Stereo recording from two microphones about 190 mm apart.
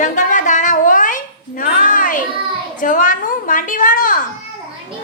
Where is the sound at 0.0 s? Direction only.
40° left (ahead or behind).